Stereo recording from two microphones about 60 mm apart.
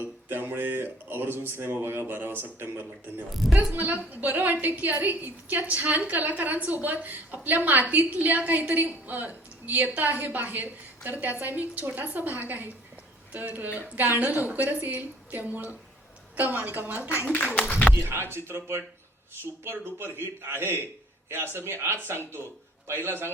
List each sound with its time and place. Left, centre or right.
0.0 s a woman's voice: right
17.2 s speech: left
18.1 s speech: right